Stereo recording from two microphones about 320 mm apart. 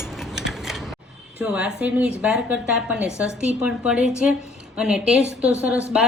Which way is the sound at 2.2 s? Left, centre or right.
Centre.